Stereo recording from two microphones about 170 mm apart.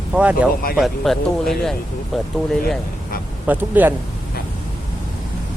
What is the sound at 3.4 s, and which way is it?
Speech, 10° right (ahead or behind).